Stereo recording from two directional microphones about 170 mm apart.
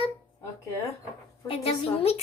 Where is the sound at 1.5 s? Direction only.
35° left (ahead or behind).